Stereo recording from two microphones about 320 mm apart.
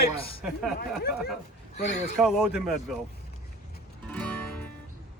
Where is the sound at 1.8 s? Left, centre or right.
Left.